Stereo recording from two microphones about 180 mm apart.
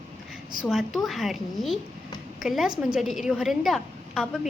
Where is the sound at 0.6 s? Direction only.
Centre (ahead or behind).